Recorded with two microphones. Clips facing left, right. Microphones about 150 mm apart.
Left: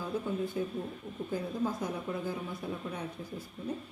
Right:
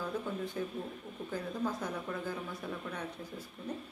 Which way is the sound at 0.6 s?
10° left (ahead or behind).